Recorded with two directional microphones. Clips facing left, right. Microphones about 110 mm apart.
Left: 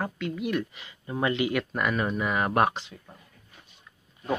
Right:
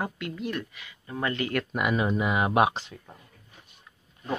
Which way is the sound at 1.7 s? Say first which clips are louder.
Right 1 dB; 15° right (ahead or behind).